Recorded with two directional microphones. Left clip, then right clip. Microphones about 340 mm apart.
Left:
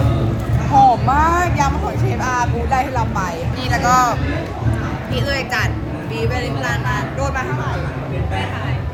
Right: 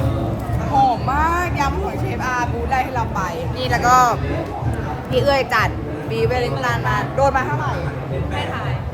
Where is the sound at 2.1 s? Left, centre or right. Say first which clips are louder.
Left 3 dB; centre.